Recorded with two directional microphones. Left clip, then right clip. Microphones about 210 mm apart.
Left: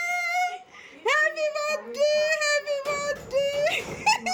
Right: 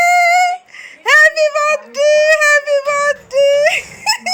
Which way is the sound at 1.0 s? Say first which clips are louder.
Right 14 dB; centre (ahead or behind).